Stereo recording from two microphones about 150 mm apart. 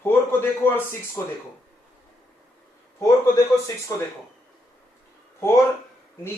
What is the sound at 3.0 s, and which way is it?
Speech, 20° left (ahead or behind).